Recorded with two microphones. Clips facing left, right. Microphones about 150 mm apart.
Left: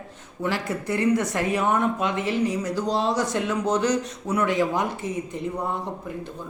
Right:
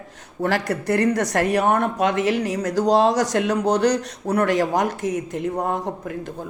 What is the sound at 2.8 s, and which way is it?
A man's voice, 90° right.